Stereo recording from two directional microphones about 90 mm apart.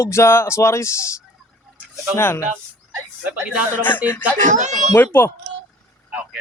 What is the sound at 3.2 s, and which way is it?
Speech, 15° right (ahead or behind).